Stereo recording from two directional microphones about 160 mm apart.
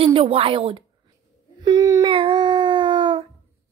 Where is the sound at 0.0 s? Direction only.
35° right (ahead or behind).